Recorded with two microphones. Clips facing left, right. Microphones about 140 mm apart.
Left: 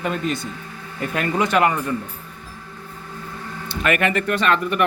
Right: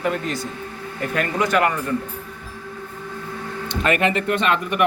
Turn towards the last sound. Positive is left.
turn(degrees=-15)  # may be behind; listen again after turning